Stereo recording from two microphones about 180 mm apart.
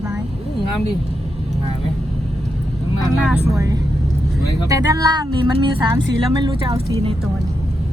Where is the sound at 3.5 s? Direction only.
20° right (ahead or behind).